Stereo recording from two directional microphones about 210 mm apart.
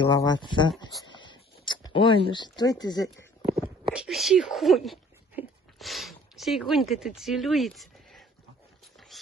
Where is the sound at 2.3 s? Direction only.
20° left (ahead or behind).